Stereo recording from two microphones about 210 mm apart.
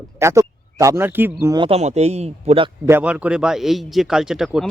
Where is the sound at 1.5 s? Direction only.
25° right (ahead or behind).